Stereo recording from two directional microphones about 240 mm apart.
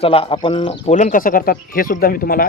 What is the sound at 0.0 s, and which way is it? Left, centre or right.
Speech, left.